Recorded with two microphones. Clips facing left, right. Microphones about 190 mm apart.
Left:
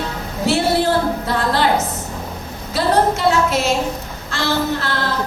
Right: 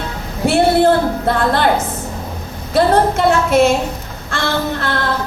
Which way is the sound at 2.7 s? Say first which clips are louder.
Right 4 dB; 55° right (ahead or behind).